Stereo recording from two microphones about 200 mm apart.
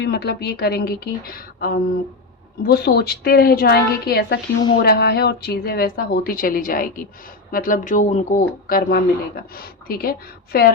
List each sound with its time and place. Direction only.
0.0 s speech: 55° left (ahead or behind)